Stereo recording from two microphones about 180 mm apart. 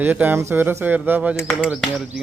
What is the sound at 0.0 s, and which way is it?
Speech, 10° right (ahead or behind).